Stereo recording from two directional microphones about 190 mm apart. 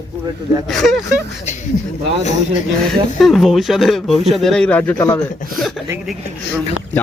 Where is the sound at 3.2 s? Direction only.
Centre (ahead or behind).